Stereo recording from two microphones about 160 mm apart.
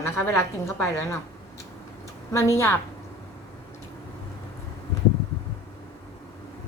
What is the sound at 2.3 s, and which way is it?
Speech, 15° left (ahead or behind).